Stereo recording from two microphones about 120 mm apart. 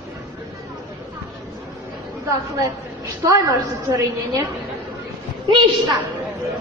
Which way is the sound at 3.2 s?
25° right (ahead or behind).